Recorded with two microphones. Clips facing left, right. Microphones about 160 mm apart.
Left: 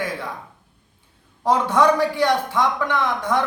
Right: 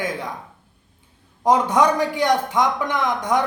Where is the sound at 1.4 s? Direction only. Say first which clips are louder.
Even; 15° right (ahead or behind).